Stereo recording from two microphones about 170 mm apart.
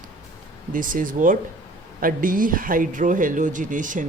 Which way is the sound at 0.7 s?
55° right (ahead or behind).